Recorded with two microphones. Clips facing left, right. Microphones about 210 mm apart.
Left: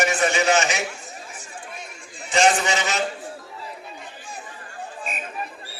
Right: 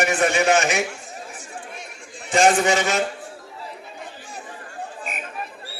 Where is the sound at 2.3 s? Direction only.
50° right (ahead or behind).